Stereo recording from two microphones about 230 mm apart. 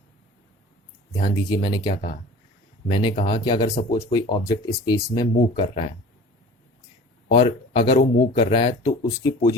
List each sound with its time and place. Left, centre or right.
1.1 s speech: centre
7.3 s speech: left